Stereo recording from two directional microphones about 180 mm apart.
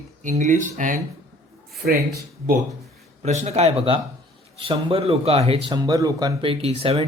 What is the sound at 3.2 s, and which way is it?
Speech, 40° right (ahead or behind).